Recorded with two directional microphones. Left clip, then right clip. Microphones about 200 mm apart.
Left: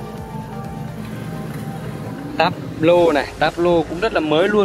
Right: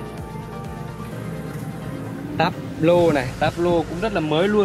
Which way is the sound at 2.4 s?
5° right (ahead or behind).